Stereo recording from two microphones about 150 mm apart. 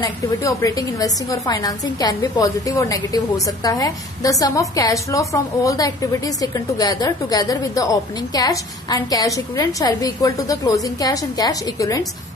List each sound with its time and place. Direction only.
0.0 s a woman's voice: 20° left (ahead or behind)